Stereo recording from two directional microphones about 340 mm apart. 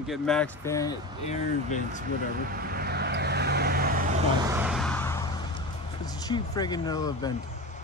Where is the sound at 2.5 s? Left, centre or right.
Right.